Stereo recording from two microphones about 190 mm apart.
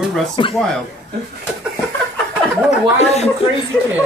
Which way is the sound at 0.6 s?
5° left (ahead or behind).